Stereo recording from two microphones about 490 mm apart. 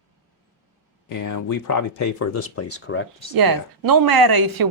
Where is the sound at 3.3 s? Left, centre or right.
Right.